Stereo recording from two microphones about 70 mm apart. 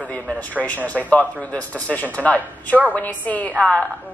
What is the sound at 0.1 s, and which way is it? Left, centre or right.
Speech, centre.